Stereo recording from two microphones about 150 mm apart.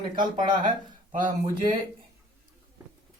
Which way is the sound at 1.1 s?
60° right (ahead or behind).